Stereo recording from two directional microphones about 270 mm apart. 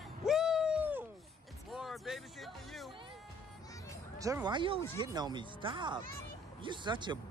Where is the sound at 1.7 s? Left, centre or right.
Centre.